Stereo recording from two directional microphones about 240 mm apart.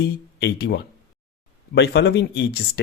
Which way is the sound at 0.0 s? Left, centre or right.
Left.